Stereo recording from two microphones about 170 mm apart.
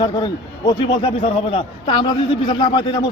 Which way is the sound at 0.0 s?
25° left (ahead or behind).